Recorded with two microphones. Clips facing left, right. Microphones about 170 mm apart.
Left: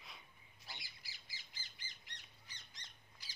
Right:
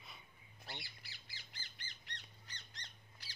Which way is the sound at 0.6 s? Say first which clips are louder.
Right 5 dB; 60° right (ahead or behind).